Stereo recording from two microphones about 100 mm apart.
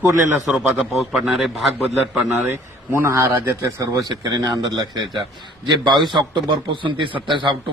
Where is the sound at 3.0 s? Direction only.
25° right (ahead or behind).